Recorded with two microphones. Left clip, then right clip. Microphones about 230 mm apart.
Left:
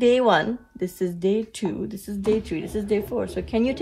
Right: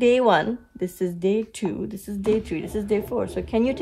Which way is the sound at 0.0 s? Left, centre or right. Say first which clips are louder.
Even; right.